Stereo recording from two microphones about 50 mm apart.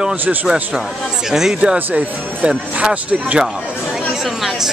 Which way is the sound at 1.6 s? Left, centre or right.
Right.